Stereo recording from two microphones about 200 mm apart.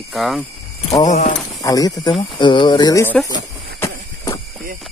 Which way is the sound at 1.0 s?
35° left (ahead or behind).